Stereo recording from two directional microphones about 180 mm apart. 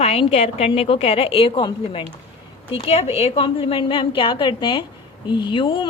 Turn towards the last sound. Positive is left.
turn(degrees=25)  # may be behind; listen again after turning